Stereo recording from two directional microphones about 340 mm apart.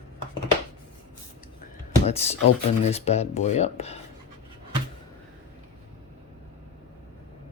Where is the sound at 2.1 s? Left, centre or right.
Centre.